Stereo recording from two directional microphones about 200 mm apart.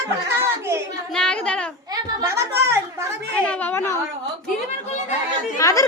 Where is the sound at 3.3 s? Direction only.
5° left (ahead or behind).